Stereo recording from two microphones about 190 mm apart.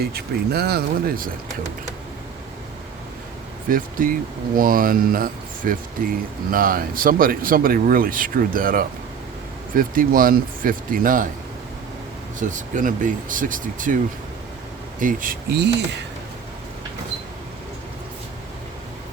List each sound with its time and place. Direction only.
0.0 s speech: 55° right (ahead or behind)
3.7 s speech: 45° right (ahead or behind)
12.4 s speech: 40° right (ahead or behind)
15.0 s speech: 45° right (ahead or behind)